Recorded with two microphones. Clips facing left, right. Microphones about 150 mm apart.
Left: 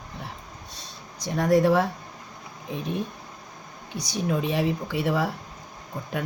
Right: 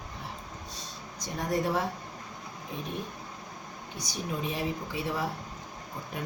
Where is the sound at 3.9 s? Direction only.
80° left.